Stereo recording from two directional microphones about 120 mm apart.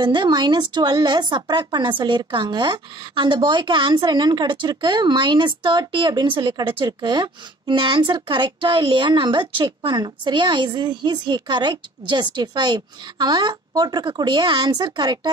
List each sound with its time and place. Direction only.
0.0 s a woman's voice: 40° right (ahead or behind)